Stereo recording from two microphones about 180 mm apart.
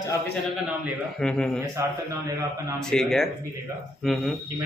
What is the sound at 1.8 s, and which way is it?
Speech, 15° right (ahead or behind).